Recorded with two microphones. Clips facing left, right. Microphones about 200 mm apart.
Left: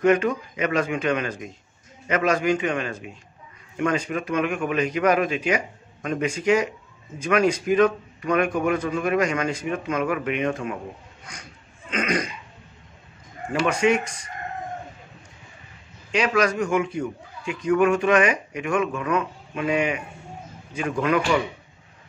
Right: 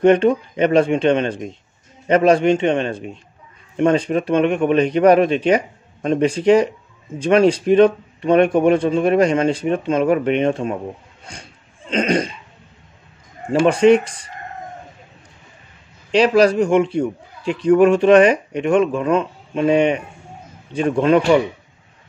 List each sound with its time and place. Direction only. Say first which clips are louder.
0.0 s a man's voice: right 6 dB; 30° right (ahead or behind)
11.2 s a sound: right 5 dB; 30° right (ahead or behind)
13.5 s a man's voice: right 9 dB; 30° right (ahead or behind)
16.1 s a man's voice: right 8 dB; 35° right (ahead or behind)